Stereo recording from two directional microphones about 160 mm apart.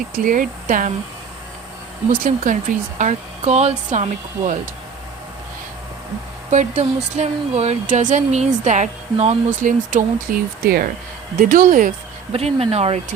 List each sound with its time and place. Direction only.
0.1 s speech: 60° right (ahead or behind)
2.2 s speech: 55° right (ahead or behind)
6.5 s speech: 50° right (ahead or behind)
12.3 s speech: 40° right (ahead or behind)